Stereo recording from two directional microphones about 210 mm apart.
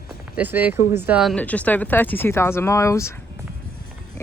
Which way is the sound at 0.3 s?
10° right (ahead or behind).